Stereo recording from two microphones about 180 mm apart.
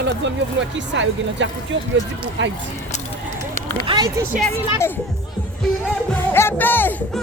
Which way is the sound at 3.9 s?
20° right (ahead or behind).